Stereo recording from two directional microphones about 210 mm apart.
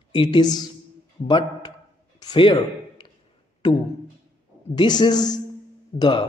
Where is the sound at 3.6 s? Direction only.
20° left (ahead or behind).